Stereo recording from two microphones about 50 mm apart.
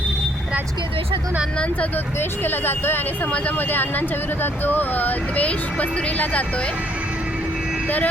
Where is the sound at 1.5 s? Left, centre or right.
Left.